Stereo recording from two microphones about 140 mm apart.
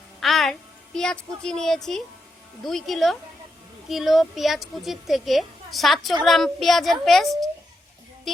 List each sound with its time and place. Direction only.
0.2 s music: centre (ahead or behind)
0.9 s a woman's voice: 5° left (ahead or behind)